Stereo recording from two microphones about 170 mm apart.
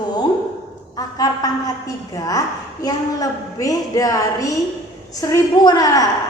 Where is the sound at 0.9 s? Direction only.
20° left (ahead or behind).